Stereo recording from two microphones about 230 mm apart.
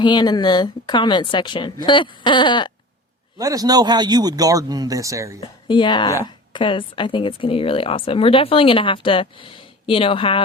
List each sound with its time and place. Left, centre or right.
0.0 s speech: centre
3.3 s speech: centre
5.4 s speech: left